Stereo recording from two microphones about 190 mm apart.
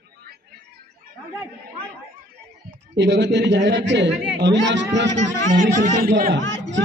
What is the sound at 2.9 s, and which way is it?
Speech, 65° right (ahead or behind).